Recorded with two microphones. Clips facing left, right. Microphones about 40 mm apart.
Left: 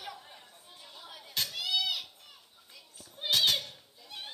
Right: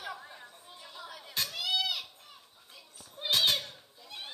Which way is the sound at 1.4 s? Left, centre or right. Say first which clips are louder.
Even; right.